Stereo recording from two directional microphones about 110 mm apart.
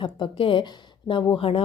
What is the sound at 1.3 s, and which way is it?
Speech, 60° left (ahead or behind).